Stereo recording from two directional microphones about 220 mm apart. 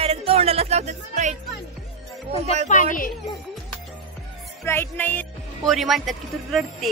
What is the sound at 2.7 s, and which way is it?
Speech, 35° left (ahead or behind).